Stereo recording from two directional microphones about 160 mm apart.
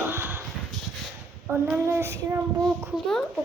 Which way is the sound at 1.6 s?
15° right (ahead or behind).